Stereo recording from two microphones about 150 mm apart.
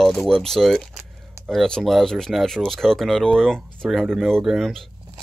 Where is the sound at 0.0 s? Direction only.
5° left (ahead or behind).